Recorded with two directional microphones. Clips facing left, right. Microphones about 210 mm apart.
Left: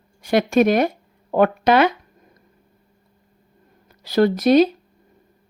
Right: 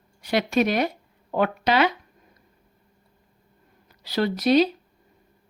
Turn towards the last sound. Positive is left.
turn(degrees=50)  # may be behind; listen again after turning